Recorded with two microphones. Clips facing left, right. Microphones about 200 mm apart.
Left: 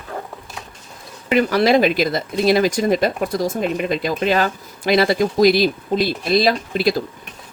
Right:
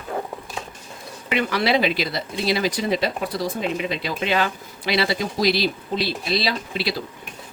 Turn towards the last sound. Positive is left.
turn(degrees=45)  # may be behind; listen again after turning